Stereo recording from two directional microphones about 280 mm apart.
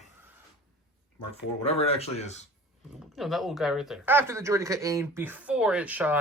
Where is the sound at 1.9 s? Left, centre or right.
Left.